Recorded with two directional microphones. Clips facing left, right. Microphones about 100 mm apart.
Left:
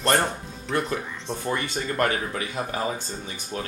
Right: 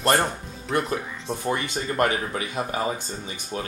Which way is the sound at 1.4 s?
15° right (ahead or behind).